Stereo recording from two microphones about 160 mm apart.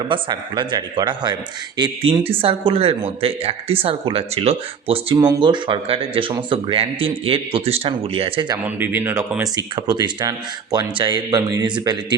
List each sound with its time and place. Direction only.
0.0 s speech: 25° right (ahead or behind)
8.6 s speech: 10° right (ahead or behind); by 11.9 s 25° right (ahead or behind)